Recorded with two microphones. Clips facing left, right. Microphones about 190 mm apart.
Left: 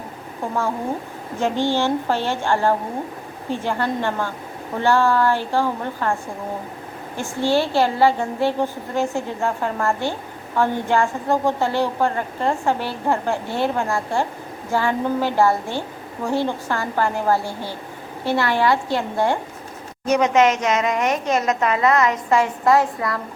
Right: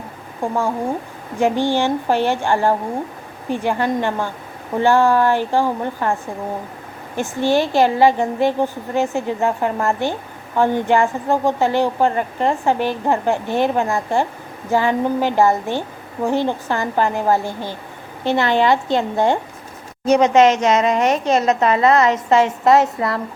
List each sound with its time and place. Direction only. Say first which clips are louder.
0.4 s a woman's voice: right 3 dB; 15° right (ahead or behind)
7.2 s a woman's voice: right 2 dB; 15° right (ahead or behind)